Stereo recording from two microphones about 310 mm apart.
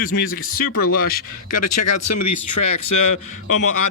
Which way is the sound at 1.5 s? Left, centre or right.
Left.